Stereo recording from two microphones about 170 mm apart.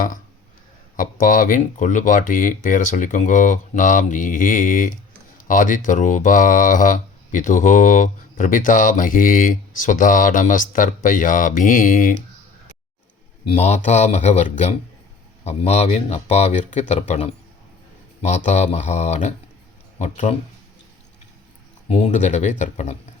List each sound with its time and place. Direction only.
0.9 s speech: 50° left (ahead or behind)
13.5 s speech: 40° left (ahead or behind)
21.8 s speech: 40° left (ahead or behind)